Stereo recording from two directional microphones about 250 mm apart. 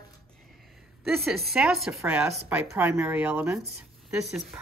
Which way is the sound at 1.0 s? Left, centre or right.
Centre.